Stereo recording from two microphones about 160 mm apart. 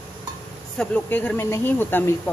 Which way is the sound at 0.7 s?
10° left (ahead or behind).